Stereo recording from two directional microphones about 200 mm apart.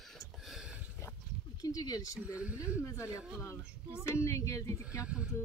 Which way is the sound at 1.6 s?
20° left (ahead or behind).